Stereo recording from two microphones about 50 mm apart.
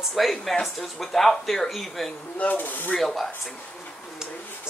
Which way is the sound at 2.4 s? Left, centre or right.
Left.